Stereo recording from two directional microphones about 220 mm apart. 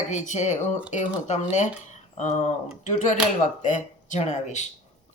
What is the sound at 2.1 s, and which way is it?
Speech, 35° left (ahead or behind).